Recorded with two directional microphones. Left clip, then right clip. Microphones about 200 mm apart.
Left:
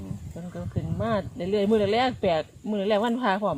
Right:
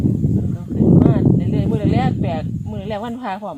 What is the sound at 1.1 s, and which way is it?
Speech, 35° left (ahead or behind).